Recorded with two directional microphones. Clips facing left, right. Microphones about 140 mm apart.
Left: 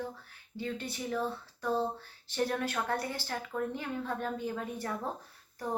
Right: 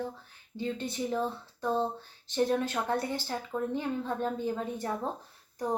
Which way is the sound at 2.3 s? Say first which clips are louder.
Right 4 dB; 25° right (ahead or behind).